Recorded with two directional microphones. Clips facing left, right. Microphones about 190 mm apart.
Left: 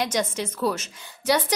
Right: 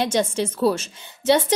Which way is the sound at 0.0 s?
30° right (ahead or behind).